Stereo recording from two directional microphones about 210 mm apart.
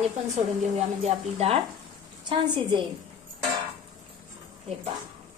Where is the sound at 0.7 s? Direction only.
30° right (ahead or behind).